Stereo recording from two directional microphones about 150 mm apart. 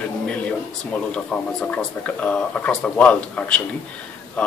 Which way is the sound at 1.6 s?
10° left (ahead or behind).